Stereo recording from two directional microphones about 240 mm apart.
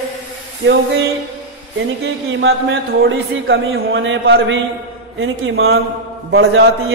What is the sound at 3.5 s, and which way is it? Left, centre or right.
A man's voice, right.